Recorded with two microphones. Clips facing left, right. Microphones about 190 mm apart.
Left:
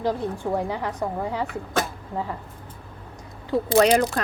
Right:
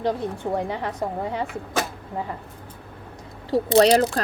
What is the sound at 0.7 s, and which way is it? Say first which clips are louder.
Speech: even; 20° right (ahead or behind).